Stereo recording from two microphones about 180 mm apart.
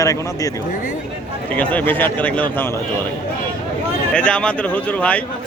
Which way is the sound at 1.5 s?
10° left (ahead or behind).